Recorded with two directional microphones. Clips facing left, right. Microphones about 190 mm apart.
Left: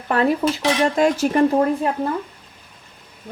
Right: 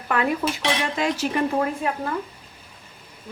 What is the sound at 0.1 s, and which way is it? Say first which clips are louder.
Speech: left 5 dB; 35° left (ahead or behind).